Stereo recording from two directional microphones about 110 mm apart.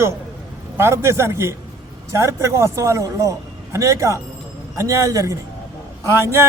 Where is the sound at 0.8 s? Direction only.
25° right (ahead or behind).